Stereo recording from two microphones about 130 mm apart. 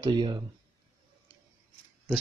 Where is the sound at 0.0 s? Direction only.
35° right (ahead or behind).